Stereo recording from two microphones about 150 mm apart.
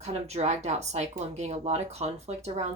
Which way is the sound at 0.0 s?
45° right (ahead or behind).